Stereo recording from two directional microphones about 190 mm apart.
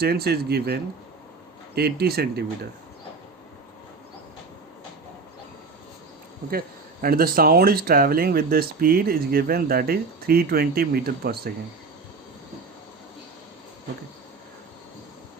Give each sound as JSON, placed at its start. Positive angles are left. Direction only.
{"t": 0.0, "sound": "speech", "side_deg": -55}
{"t": 6.5, "sound": "speech", "side_deg": -50}